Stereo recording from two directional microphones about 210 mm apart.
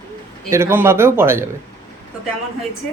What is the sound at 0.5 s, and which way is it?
Speech, 10° right (ahead or behind).